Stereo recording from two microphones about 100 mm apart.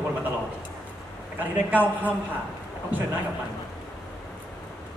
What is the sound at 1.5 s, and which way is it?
Speech, 15° right (ahead or behind).